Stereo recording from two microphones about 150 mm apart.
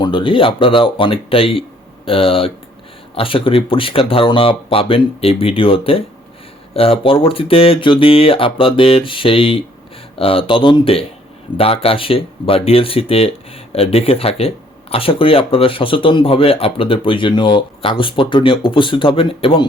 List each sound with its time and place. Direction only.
0.0 s speech: 30° left (ahead or behind)